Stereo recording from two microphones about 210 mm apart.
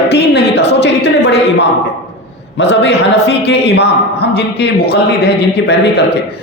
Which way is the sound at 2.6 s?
55° left (ahead or behind).